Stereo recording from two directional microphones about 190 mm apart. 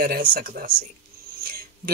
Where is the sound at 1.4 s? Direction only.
50° right (ahead or behind).